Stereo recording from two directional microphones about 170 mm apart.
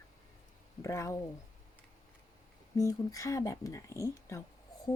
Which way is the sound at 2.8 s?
20° left (ahead or behind).